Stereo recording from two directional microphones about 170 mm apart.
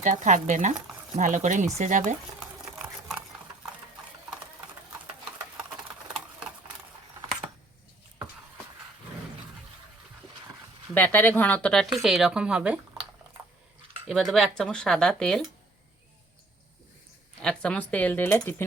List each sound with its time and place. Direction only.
0.0 s speech: 45° right (ahead or behind)
2.4 s sewing machine: 5° right (ahead or behind)
10.9 s speech: 10° left (ahead or behind); by 12.8 s 5° right (ahead or behind)
14.1 s speech: centre (ahead or behind)
17.4 s speech: 5° left (ahead or behind)